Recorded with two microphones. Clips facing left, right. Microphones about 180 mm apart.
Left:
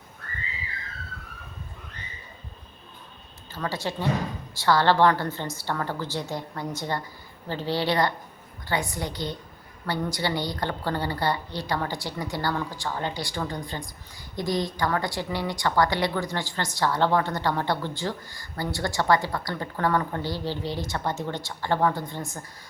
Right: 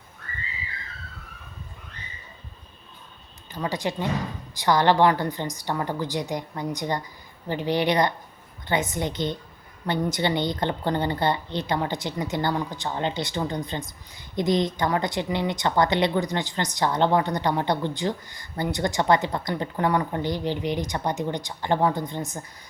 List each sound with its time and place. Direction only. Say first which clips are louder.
3.5 s a woman's voice: right 2 dB; 15° right (ahead or behind)